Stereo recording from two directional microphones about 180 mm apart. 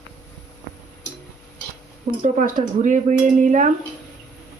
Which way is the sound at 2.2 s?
45° right (ahead or behind).